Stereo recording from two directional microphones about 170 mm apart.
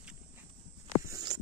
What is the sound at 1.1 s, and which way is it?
Hum, 20° right (ahead or behind).